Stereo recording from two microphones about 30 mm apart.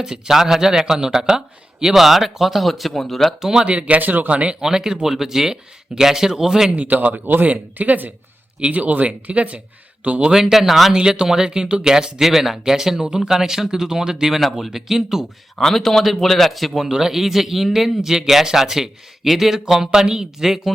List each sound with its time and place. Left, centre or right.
0.0 s speech: centre
3.4 s speech: centre
3.7 s speech: right
4.0 s speech: right
4.3 s speech: right
4.6 s speech: centre
7.1 s speech: right
9.0 s speech: right
10.3 s speech: centre
10.9 s speech: right
12.2 s speech: centre
15.5 s speech: centre
16.8 s speech: centre
20.4 s speech: centre